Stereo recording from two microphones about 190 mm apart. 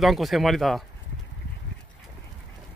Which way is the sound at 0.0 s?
Centre (ahead or behind).